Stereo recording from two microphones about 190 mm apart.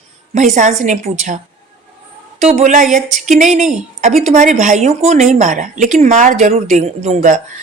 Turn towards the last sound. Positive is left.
turn(degrees=-40)  # may be behind; listen again after turning